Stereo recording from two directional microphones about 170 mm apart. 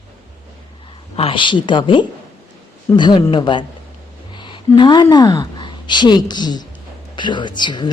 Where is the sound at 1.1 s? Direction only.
30° left (ahead or behind).